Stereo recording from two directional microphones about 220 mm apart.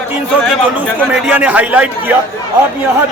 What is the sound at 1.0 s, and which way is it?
A man's voice, centre (ahead or behind).